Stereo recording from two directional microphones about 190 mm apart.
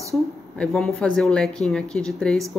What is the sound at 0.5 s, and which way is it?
Speech, centre (ahead or behind).